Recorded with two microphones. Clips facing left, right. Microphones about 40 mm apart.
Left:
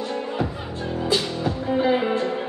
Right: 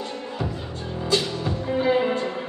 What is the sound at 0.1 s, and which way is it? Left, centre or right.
Music, centre.